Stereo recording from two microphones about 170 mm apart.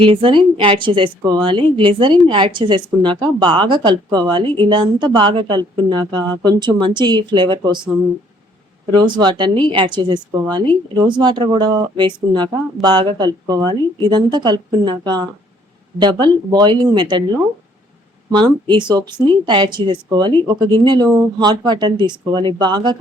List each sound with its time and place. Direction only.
0.0 s a woman's voice: 30° right (ahead or behind)
8.9 s a woman's voice: 25° right (ahead or behind)